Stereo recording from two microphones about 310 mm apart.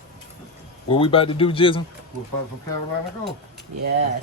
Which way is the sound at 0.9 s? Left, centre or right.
Centre.